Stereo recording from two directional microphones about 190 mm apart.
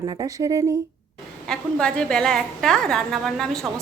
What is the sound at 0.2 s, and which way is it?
Speech, 20° right (ahead or behind).